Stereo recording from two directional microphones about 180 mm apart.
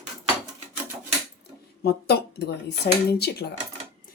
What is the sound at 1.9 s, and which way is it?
Speech, 65° left (ahead or behind).